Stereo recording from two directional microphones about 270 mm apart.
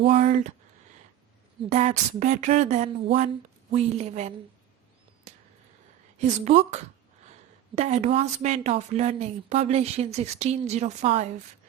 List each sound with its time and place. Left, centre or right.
0.0 s a woman's voice: right
1.7 s a woman's voice: right
5.3 s a sound: right
6.1 s a woman's voice: right